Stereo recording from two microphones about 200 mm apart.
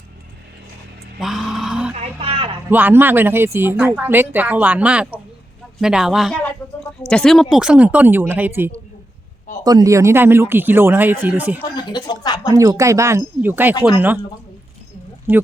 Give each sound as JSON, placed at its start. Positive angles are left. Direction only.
{"t": 1.2, "sound": "music", "side_deg": 0}
{"t": 2.0, "sound": "a sound", "side_deg": -30}
{"t": 2.6, "sound": "speech", "side_deg": -10}
{"t": 11.6, "sound": "speech", "side_deg": 20}
{"t": 12.5, "sound": "speech", "side_deg": -15}
{"t": 13.7, "sound": "speech", "side_deg": 20}
{"t": 15.3, "sound": "speech", "side_deg": -10}